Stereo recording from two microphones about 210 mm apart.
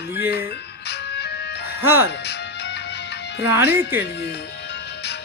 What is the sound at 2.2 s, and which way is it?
Music, 50° left (ahead or behind).